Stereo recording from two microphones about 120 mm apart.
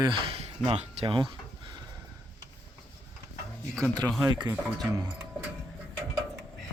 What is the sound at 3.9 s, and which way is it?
Speech, 35° right (ahead or behind).